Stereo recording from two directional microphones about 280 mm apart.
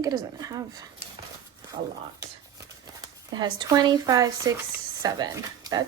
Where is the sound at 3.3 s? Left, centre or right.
Centre.